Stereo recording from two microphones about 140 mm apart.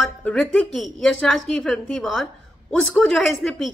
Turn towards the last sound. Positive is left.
turn(degrees=0)  # may be behind; listen again after turning